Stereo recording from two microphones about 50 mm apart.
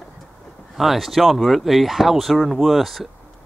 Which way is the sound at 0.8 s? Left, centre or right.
Centre.